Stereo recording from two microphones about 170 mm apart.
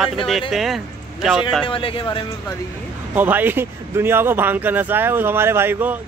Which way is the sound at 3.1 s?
10° right (ahead or behind).